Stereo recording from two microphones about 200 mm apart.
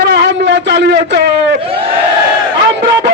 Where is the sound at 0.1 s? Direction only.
60° right (ahead or behind).